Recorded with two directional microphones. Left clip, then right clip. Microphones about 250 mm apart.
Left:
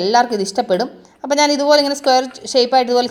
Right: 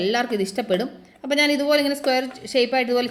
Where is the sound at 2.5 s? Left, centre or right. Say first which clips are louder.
Left 6 dB; centre.